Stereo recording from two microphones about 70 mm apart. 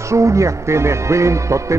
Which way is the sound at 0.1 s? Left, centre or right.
Right.